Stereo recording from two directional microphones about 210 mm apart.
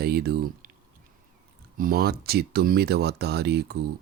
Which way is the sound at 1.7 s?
45° right (ahead or behind).